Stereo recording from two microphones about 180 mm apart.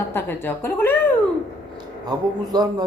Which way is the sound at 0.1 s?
10° left (ahead or behind).